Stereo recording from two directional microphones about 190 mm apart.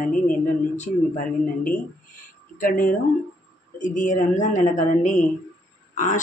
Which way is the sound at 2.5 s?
45° left (ahead or behind).